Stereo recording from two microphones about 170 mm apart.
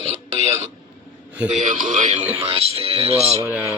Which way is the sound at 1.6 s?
50° right (ahead or behind).